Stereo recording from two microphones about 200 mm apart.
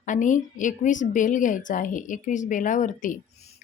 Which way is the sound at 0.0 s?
40° left (ahead or behind).